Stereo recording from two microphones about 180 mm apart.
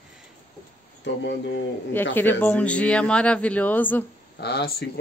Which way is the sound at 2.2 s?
10° left (ahead or behind).